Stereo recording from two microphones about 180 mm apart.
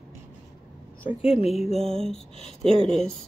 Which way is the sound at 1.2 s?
35° left (ahead or behind).